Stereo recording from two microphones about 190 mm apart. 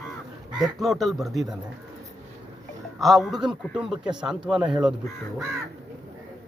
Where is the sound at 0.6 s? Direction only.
Centre (ahead or behind).